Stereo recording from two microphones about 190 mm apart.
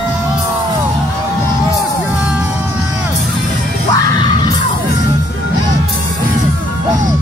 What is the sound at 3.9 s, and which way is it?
Music, 25° left (ahead or behind).